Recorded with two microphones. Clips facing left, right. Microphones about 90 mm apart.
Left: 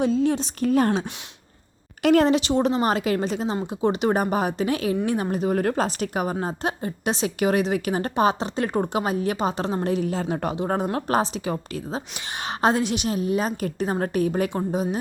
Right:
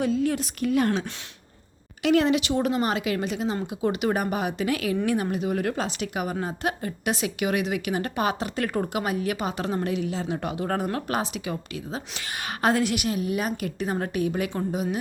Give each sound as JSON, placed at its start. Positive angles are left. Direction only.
{"t": 0.0, "sound": "a woman's voice", "side_deg": 25}
{"t": 10.6, "sound": "a woman's voice", "side_deg": 20}
{"t": 11.1, "sound": "speech", "side_deg": 35}
{"t": 12.5, "sound": "speech", "side_deg": 25}